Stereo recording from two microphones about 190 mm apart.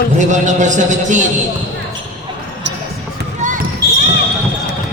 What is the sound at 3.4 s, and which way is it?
Basketball bounce, 40° right (ahead or behind).